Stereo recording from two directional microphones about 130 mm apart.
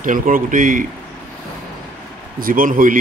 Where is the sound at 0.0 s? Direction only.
90° right.